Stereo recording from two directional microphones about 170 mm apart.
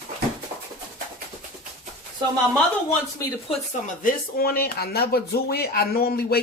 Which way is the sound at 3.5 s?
50° left (ahead or behind).